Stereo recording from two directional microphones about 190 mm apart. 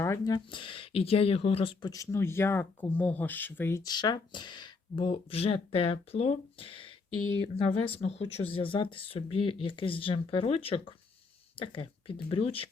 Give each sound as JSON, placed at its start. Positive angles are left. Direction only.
{"t": 0.0, "sound": "speech", "side_deg": 15}
{"t": 7.2, "sound": "speech", "side_deg": 90}
{"t": 7.4, "sound": "speech", "side_deg": 30}